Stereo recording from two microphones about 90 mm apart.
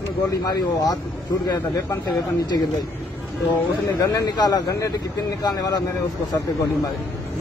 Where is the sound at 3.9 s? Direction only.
45° left (ahead or behind).